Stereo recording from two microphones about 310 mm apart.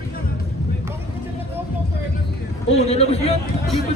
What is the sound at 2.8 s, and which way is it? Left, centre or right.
Speech, centre.